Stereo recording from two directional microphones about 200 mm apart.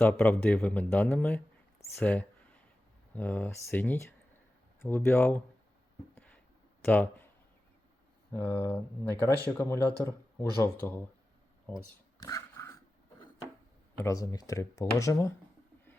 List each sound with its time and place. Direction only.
0.0 s speech: 10° left (ahead or behind)
2.0 s a sound: 10° left (ahead or behind)
3.1 s speech: 10° left (ahead or behind)
6.1 s a sound: 5° left (ahead or behind)
6.8 s speech: 10° left (ahead or behind)
8.3 s speech: 10° left (ahead or behind)
12.2 s dog: 15° left (ahead or behind)
14.0 s speech: 15° left (ahead or behind)